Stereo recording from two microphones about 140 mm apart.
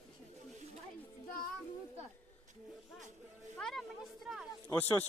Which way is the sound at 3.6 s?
5° left (ahead or behind).